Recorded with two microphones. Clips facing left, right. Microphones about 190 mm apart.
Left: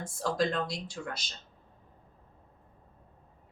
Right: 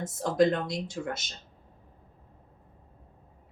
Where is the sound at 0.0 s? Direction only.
20° right (ahead or behind).